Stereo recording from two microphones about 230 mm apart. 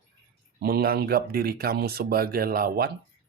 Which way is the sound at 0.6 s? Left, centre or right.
Right.